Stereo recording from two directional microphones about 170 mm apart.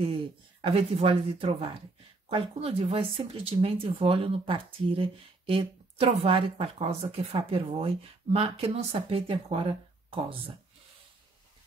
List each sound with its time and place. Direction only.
0.6 s speech: 35° right (ahead or behind)